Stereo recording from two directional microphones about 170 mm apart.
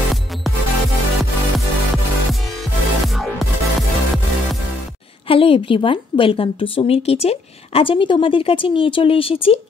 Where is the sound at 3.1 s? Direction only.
Centre (ahead or behind).